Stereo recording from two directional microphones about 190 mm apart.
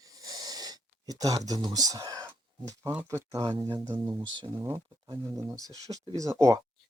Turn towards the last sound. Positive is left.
turn(degrees=-15)  # may be behind; listen again after turning